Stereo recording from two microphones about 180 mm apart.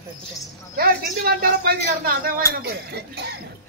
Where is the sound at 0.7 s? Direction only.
55° right (ahead or behind).